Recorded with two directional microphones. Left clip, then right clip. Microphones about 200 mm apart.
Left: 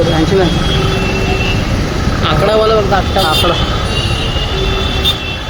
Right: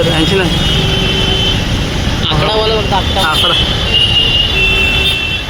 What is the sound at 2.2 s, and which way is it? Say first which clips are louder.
Vehicle: left 2 dB; 45° left (ahead or behind).